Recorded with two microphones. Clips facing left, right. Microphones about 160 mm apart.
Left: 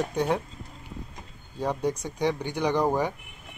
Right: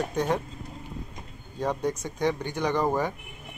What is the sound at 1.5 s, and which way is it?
Speech, 10° left (ahead or behind).